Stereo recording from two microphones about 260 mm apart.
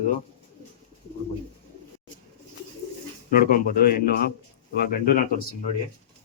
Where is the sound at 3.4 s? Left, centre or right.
Left.